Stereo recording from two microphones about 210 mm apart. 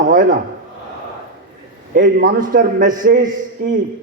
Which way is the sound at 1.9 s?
40° right (ahead or behind).